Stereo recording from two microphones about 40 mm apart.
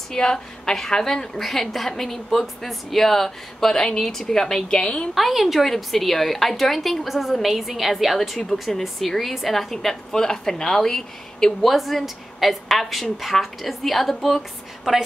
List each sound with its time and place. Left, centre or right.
0.1 s speech: centre
5.1 s a woman's voice: centre
8.2 s speech: centre
11.6 s a woman's voice: centre